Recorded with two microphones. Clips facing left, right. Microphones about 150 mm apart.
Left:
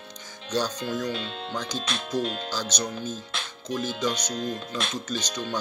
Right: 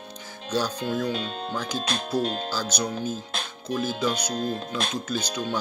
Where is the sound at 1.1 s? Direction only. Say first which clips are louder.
Right 3 dB; 45° right (ahead or behind).